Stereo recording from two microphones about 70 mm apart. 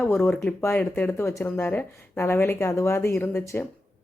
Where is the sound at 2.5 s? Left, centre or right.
Left.